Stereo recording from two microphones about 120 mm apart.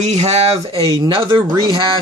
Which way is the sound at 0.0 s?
65° right (ahead or behind).